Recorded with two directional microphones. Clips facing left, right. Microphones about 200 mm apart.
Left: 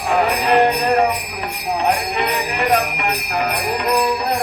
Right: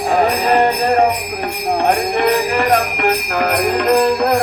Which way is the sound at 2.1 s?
60° right (ahead or behind).